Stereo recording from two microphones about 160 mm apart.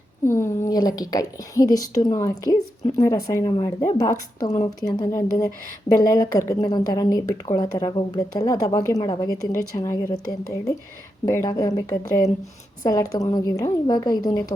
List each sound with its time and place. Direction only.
0.3 s a woman's voice: 15° left (ahead or behind)